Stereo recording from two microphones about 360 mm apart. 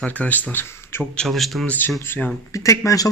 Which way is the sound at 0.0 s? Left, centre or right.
Centre.